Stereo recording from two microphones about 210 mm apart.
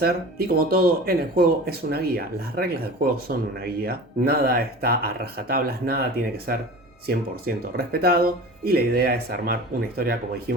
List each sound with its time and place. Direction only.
0.0 s speech: 45° right (ahead or behind)
7.1 s speech: 45° right (ahead or behind)